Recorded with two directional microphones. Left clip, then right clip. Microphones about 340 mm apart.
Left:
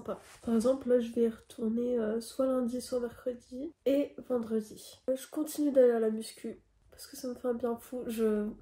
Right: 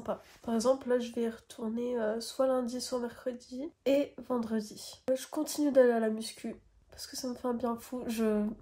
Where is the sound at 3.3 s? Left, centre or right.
Centre.